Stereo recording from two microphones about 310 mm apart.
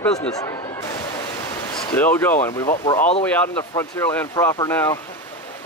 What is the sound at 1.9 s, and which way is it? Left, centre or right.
Speech, centre.